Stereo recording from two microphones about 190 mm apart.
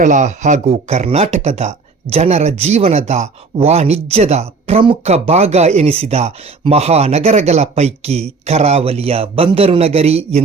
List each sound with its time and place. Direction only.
0.0 s speech: 40° right (ahead or behind)